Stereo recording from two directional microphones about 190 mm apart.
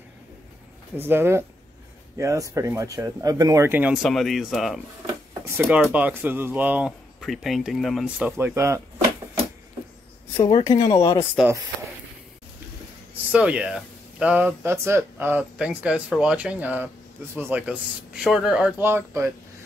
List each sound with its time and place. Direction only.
0.9 s speech: 10° right (ahead or behind)
5.0 s a sound: 15° right (ahead or behind)
5.6 s speech: 5° right (ahead or behind)
8.4 s speech: 15° right (ahead or behind)
10.6 s speech: 20° left (ahead or behind)
11.3 s speech: 10° right (ahead or behind)
13.3 s speech: 5° right (ahead or behind)